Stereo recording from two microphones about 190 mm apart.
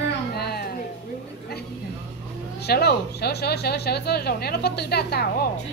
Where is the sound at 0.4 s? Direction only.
55° left (ahead or behind).